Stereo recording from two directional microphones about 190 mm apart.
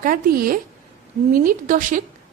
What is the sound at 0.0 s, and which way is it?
A woman's voice, 50° right (ahead or behind).